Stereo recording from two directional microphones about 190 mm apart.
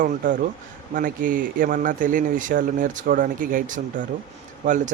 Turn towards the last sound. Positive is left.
turn(degrees=-40)  # may be behind; listen again after turning